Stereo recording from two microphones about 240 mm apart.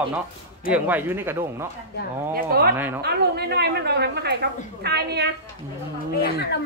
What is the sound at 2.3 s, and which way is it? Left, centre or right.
A woman's voice, right.